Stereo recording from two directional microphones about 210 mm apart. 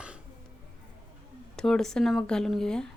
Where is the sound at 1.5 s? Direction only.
Centre (ahead or behind).